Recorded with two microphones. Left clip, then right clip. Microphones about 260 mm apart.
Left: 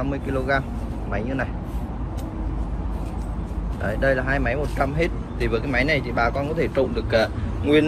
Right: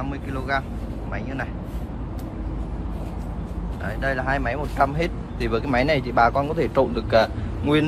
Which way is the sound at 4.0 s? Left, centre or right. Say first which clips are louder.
Left 2 dB; centre.